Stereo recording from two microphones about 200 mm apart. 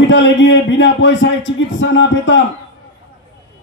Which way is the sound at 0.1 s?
65° left (ahead or behind).